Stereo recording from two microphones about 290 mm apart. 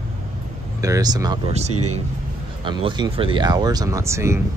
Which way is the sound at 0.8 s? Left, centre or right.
Centre.